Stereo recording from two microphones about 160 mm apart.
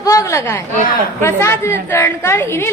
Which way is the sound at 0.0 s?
20° left (ahead or behind).